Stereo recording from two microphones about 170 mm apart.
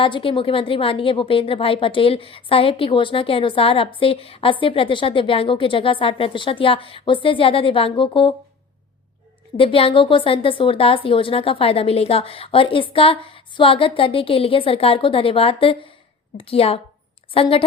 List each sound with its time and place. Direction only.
0.0 s a woman's voice: 30° left (ahead or behind)
9.6 s a woman's voice: 30° left (ahead or behind)